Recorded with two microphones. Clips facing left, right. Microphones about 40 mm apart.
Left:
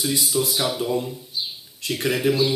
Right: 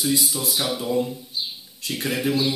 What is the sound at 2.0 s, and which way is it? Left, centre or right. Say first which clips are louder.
Speech: left 3 dB; left.